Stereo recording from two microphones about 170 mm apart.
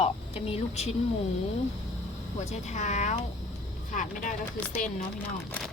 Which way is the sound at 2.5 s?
45° left (ahead or behind).